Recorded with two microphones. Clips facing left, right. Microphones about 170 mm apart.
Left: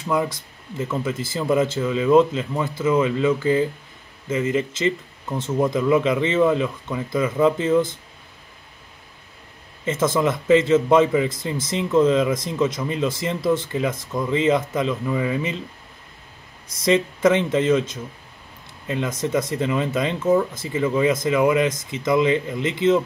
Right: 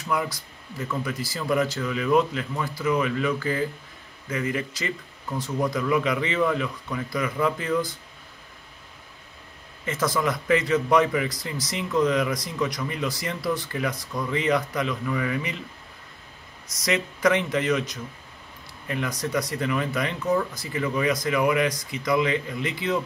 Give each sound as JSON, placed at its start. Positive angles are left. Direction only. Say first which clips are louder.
{"t": 0.0, "sound": "speech", "louder": "left 5 dB", "side_deg": 25}
{"t": 9.8, "sound": "speech", "louder": "left 5 dB", "side_deg": 25}
{"t": 16.7, "sound": "speech", "louder": "left 7 dB", "side_deg": 25}